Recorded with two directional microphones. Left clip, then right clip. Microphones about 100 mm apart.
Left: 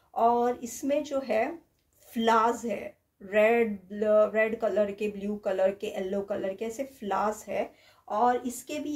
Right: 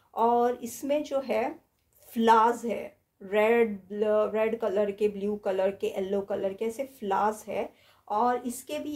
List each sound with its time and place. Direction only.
0.1 s speech: 40° right (ahead or behind)